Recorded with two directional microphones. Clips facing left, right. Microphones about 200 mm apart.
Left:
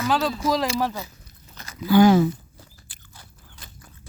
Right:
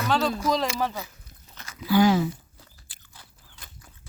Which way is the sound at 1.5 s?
35° left (ahead or behind).